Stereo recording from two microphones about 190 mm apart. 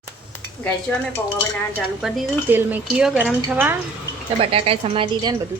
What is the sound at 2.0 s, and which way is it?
Speech, 5° right (ahead or behind).